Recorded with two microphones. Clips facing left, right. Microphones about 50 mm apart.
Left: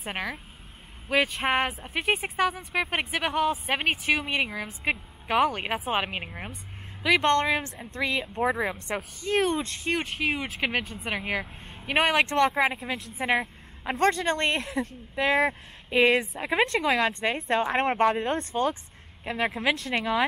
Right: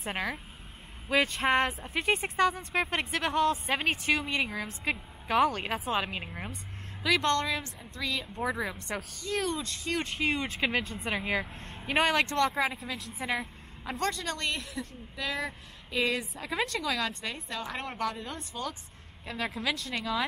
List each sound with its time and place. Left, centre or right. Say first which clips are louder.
0.0 s speech: left 1 dB; centre
5.9 s speech: left 3 dB; left
9.3 s speech: left 7 dB; left
9.9 s speech: even; centre
12.2 s speech: left 5 dB; left
13.8 s speech: left 8 dB; left
18.1 s speech: left 12 dB; left
19.2 s speech: left 6 dB; left